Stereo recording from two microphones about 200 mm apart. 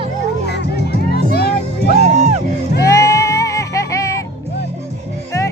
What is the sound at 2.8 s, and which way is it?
Music, 15° left (ahead or behind).